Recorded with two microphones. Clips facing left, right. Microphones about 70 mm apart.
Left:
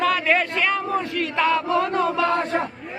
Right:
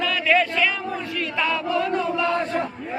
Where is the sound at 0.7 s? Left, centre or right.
Left.